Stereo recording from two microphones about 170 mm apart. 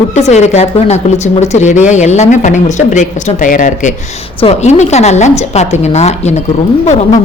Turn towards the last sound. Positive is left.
turn(degrees=40)  # may be behind; listen again after turning